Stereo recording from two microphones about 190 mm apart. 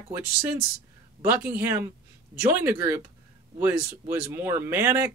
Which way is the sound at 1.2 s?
10° right (ahead or behind).